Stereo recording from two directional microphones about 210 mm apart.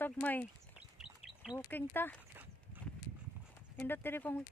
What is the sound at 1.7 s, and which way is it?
Speech, 10° left (ahead or behind).